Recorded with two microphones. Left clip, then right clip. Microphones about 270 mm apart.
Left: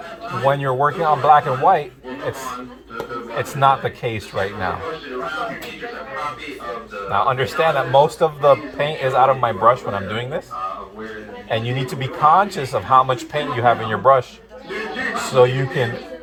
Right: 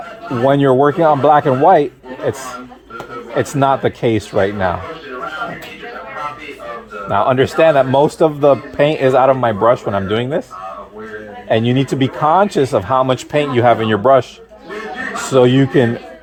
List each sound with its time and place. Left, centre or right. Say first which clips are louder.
0.4 s a man's voice: right 6 dB; right
3.5 s a man's voice: right 1 dB; right
7.1 s a man's voice: right 5 dB; right
11.4 s a man's voice: right 8 dB; right